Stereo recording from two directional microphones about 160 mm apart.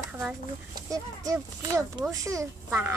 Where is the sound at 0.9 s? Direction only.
20° right (ahead or behind).